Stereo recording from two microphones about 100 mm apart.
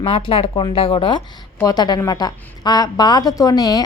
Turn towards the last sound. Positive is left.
turn(degrees=40)  # may be behind; listen again after turning